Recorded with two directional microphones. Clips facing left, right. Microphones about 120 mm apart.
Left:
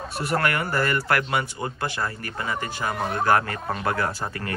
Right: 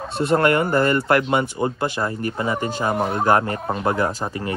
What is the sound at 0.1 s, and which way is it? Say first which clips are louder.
Speech: right 7 dB; 25° right (ahead or behind).